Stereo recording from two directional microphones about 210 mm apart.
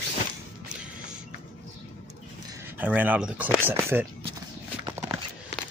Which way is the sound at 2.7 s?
10° right (ahead or behind).